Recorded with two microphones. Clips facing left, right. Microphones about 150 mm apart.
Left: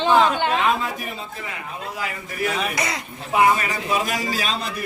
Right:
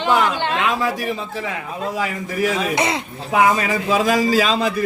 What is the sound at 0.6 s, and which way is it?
Speech, 90° right.